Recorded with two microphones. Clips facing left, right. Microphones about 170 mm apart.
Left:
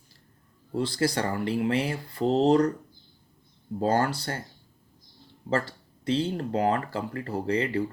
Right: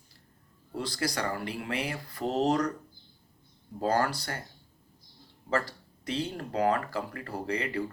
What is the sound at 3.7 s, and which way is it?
Speech, 25° left (ahead or behind).